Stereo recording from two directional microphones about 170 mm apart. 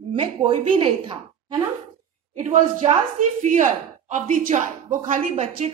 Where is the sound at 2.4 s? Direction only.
45° right (ahead or behind).